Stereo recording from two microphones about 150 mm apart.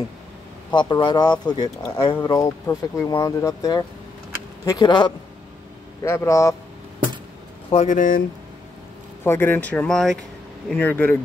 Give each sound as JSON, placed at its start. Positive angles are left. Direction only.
{"t": 0.7, "sound": "speech", "side_deg": 30}
{"t": 6.0, "sound": "speech", "side_deg": 20}
{"t": 7.7, "sound": "speech", "side_deg": 55}
{"t": 9.2, "sound": "speech", "side_deg": 15}